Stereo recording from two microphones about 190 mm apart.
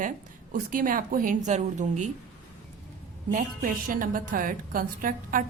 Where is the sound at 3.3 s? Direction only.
45° right (ahead or behind).